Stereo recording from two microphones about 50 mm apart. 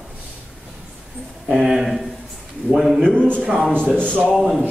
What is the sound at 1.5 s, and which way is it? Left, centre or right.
A man's voice, centre.